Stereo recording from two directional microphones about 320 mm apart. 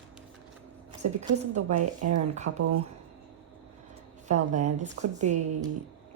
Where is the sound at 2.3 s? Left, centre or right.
Right.